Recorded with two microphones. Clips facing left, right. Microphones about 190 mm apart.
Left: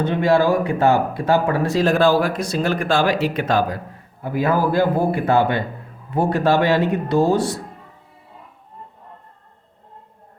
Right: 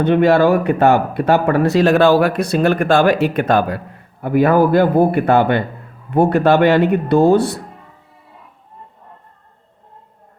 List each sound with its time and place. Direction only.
0.0 s speech: 65° right (ahead or behind)